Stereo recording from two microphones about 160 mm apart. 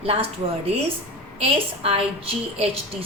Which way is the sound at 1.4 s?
35° right (ahead or behind).